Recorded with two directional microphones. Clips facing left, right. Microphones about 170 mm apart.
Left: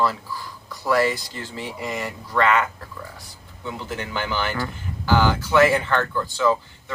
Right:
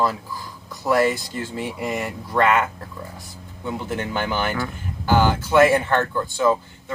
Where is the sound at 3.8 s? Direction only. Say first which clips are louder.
Right 2 dB; 50° right (ahead or behind).